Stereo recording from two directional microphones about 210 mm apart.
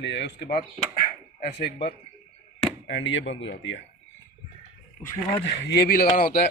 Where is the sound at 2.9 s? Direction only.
60° left (ahead or behind).